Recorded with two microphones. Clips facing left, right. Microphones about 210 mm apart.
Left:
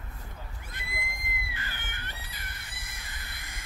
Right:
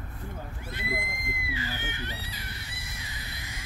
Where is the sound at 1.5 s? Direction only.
55° left (ahead or behind).